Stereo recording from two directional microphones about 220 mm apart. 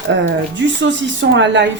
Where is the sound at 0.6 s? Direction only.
55° right (ahead or behind).